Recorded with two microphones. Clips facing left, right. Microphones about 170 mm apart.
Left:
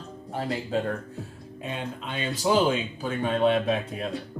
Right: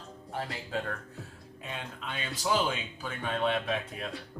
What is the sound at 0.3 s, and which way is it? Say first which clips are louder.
Speech: left 7 dB; 30° left (ahead or behind).